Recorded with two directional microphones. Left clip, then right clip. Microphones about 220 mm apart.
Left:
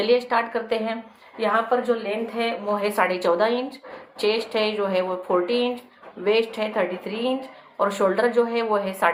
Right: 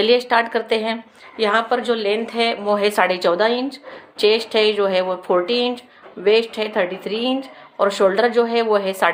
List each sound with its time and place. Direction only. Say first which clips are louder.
0.0 s a woman's voice: right 5 dB; 30° right (ahead or behind)